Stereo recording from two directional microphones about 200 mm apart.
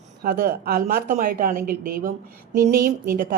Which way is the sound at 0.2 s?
50° right (ahead or behind).